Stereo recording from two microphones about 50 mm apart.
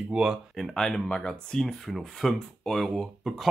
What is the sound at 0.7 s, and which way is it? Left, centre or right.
Speech, centre.